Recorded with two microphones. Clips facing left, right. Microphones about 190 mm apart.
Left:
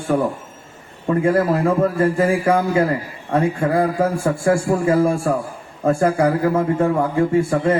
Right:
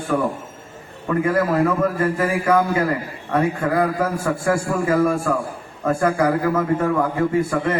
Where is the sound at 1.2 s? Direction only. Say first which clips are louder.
Left 1 dB; 30° left (ahead or behind).